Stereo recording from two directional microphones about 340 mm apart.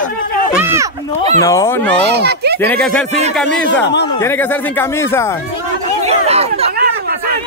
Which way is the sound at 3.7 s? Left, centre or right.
Left.